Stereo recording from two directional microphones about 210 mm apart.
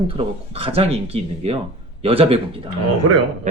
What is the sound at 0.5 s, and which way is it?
Speech, 25° right (ahead or behind).